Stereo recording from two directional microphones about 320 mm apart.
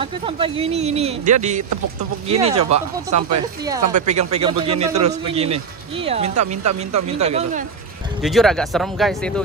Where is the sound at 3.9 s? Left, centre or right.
Right.